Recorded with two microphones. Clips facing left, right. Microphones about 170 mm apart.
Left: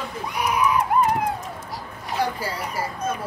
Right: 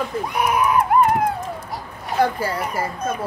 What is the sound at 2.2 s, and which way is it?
Speech, 55° right (ahead or behind).